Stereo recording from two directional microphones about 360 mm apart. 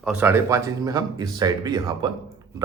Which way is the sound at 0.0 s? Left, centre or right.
Centre.